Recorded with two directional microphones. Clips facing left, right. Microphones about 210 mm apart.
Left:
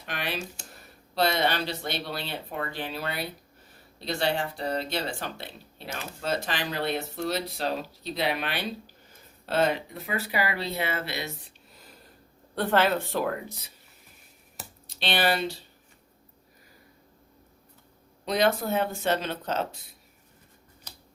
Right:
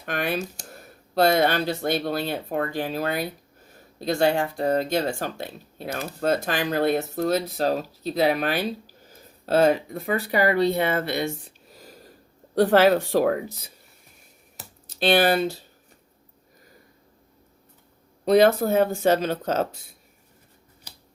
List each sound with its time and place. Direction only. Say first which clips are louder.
0.0 s speech: right 7 dB; 50° right (ahead or behind)
14.5 s a sound: left 1 dB; centre (ahead or behind)
14.9 s speech: right 7 dB; 45° right (ahead or behind)
18.3 s speech: right 8 dB; 45° right (ahead or behind)